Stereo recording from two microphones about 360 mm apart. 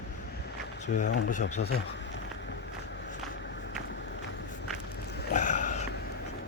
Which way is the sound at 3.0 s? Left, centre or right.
Left.